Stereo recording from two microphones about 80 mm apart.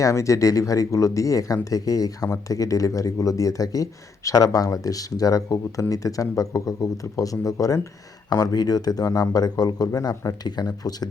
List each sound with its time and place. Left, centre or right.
0.0 s speech: left